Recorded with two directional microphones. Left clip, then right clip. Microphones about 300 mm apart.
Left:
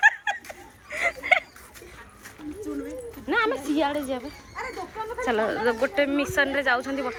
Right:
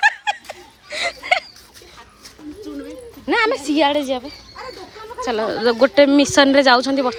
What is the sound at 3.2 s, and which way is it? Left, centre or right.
Speech, centre.